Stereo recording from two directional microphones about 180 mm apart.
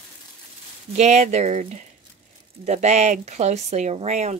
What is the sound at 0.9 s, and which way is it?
Speech, 40° right (ahead or behind).